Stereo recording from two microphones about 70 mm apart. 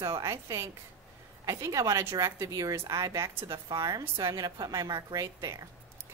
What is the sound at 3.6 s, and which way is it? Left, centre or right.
A woman's voice, right.